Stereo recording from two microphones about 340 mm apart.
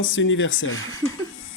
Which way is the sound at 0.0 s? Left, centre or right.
Left.